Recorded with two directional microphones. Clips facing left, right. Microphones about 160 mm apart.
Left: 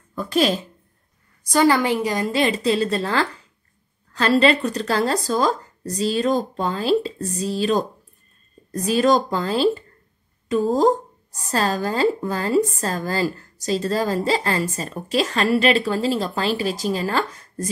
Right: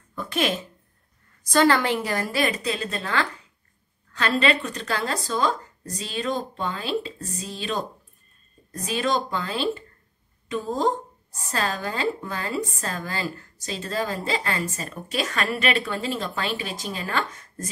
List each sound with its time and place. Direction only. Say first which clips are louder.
0.1 s a woman's voice: left 6 dB; 35° left (ahead or behind)
1.4 s a woman's voice: left 2 dB; 10° left (ahead or behind)
2.4 s speech: left 6 dB; 30° left (ahead or behind)